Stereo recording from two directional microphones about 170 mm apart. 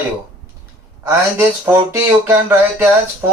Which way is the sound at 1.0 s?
15° right (ahead or behind).